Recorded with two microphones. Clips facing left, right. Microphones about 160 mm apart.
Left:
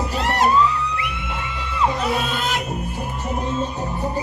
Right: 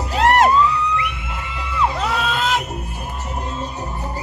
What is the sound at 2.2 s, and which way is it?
Crowd, 90° right.